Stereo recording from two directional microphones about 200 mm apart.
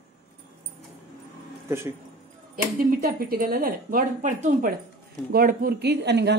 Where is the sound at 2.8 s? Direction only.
45° right (ahead or behind).